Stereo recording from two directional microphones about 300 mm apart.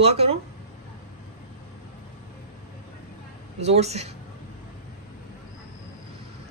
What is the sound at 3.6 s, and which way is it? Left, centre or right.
Speech, right.